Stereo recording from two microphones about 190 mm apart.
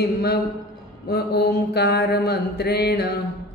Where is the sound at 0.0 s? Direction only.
55° left (ahead or behind).